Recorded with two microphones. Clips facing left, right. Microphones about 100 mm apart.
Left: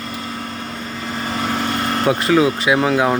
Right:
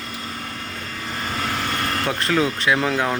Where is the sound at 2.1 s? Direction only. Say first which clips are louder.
Left 7 dB; 5° left (ahead or behind).